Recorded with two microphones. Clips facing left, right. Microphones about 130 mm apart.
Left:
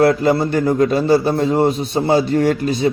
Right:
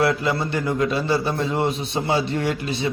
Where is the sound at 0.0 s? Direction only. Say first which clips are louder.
Left 7 dB; 40° left (ahead or behind).